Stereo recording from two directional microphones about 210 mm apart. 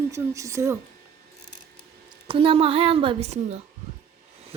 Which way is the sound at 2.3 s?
25° right (ahead or behind).